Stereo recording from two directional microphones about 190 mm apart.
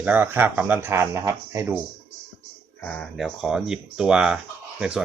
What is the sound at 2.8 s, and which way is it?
Speech, 5° left (ahead or behind).